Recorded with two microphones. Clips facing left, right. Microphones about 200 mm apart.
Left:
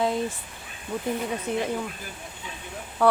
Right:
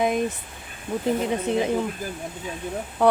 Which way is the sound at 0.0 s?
15° right (ahead or behind).